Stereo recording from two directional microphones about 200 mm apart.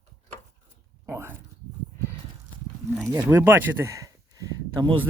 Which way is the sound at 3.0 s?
15° right (ahead or behind).